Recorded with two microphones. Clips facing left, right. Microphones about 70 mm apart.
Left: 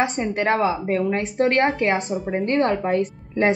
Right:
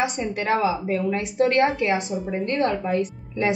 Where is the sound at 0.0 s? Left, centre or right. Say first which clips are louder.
Left 3 dB; left.